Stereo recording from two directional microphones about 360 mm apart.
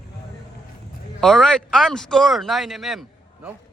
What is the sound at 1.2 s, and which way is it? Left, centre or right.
Speech, centre.